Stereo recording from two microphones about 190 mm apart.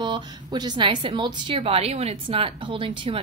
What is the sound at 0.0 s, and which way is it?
A woman's voice, 25° right (ahead or behind).